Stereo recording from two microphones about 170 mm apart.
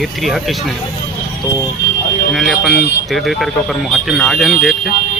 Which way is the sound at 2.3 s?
Centre (ahead or behind).